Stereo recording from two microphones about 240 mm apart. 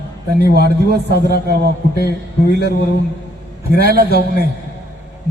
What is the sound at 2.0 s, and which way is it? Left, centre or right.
Speech, left.